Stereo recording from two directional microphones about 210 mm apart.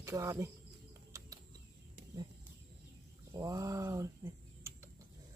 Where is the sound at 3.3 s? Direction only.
15° right (ahead or behind).